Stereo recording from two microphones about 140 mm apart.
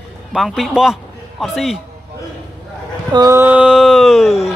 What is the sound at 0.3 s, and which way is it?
A man's voice, centre (ahead or behind).